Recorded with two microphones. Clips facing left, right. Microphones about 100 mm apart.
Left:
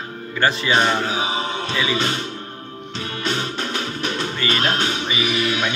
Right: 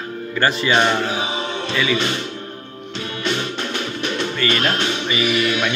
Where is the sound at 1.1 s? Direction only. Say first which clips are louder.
Even; 35° left (ahead or behind).